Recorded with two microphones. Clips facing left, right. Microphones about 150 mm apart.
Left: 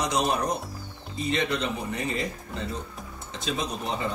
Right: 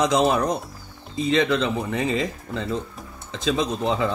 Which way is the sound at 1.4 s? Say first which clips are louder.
Right 6 dB; 90° right.